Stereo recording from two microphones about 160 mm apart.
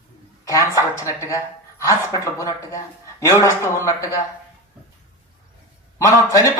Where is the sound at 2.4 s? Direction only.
20° left (ahead or behind).